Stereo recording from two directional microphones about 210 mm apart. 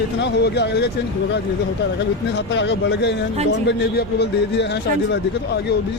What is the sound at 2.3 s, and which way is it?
A man's voice, 55° left (ahead or behind).